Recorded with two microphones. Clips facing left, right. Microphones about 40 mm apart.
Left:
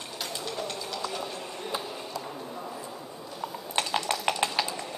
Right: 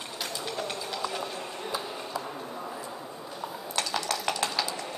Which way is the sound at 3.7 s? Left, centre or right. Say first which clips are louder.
Left 2 dB; left.